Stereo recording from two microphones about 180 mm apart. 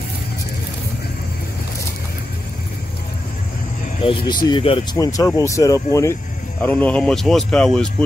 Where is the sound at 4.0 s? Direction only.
30° left (ahead or behind); by 8.1 s 5° left (ahead or behind).